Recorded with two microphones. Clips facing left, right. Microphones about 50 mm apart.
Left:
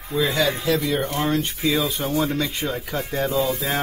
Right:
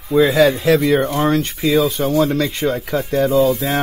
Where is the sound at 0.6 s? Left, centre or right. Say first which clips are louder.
Right 8 dB; right.